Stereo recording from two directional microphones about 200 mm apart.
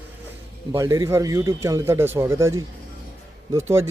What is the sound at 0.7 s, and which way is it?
Speech, 15° right (ahead or behind).